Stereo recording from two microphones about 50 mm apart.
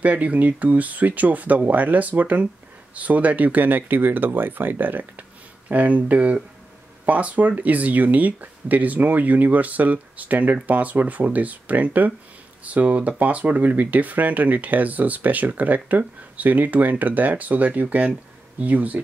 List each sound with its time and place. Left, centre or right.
0.0 s speech: right